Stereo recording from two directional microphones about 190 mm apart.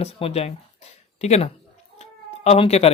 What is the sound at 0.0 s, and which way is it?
Speech, 35° left (ahead or behind).